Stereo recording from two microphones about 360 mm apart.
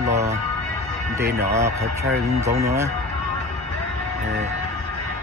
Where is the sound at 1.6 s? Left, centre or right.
Centre.